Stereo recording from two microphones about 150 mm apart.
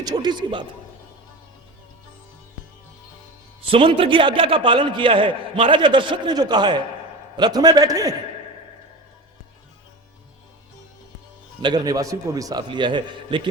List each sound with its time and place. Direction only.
0.0 s a man's voice: 25° right (ahead or behind)
3.6 s a man's voice: 35° right (ahead or behind)
11.6 s a man's voice: 25° right (ahead or behind)